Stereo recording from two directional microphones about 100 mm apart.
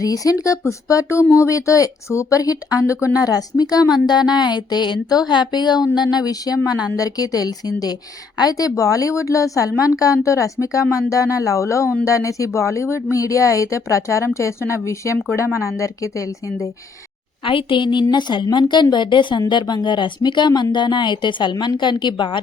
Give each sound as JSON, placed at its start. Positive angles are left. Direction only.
{"t": 0.0, "sound": "a woman's voice", "side_deg": 35}
{"t": 17.4, "sound": "a woman's voice", "side_deg": 60}